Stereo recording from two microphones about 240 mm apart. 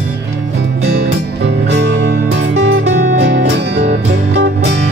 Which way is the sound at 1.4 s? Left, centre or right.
Right.